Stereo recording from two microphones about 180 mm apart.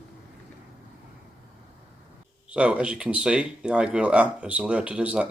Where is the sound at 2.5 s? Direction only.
5° right (ahead or behind).